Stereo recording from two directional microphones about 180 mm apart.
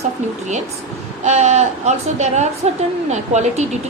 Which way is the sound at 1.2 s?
40° right (ahead or behind).